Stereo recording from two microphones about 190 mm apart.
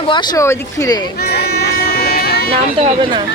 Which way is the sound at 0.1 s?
20° left (ahead or behind).